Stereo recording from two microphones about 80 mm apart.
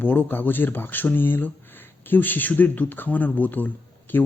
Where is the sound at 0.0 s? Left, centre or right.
Left.